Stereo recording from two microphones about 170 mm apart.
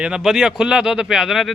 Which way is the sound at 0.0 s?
5° right (ahead or behind).